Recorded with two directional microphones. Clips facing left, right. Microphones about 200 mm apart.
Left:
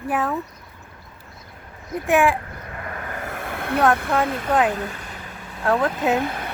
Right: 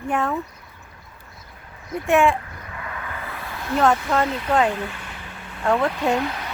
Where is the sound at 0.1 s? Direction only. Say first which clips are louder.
Even; centre (ahead or behind).